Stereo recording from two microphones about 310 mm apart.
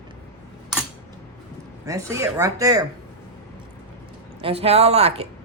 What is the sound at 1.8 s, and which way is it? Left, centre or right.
Speech, centre.